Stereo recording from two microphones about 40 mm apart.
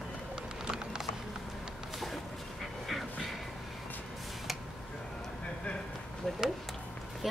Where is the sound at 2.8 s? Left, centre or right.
Centre.